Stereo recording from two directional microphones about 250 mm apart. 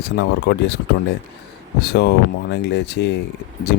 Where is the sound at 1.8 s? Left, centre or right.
Left.